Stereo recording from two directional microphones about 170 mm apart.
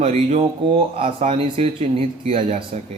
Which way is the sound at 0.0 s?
40° right (ahead or behind).